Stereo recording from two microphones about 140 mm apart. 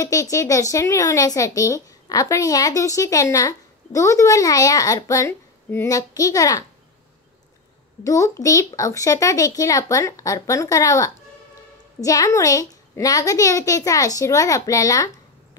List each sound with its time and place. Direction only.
0.0 s speech: 25° left (ahead or behind)
8.0 s speech: 25° left (ahead or behind)